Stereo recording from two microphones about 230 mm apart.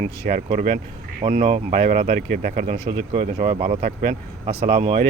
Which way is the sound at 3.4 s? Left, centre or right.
Right.